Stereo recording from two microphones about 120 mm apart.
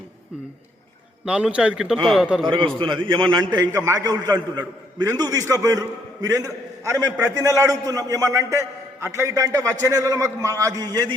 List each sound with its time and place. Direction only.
1.2 s a man's voice: 10° right (ahead or behind)
2.7 s a man's voice: 40° right (ahead or behind)